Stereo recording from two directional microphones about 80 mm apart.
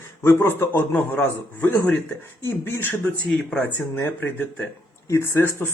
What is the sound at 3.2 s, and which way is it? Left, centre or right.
Speech, centre.